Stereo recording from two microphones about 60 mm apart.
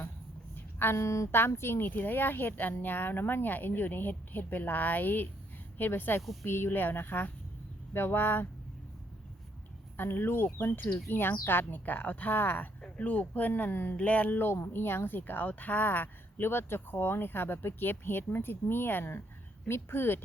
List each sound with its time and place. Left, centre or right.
0.5 s a sound: left
0.9 s speech: left
1.3 s a woman's voice: left
10.0 s a woman's voice: left
12.8 s a woman's voice: left